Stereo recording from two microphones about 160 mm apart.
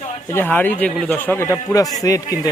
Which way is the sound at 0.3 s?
10° left (ahead or behind).